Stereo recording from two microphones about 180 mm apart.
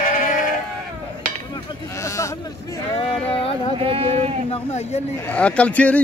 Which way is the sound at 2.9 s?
30° left (ahead or behind).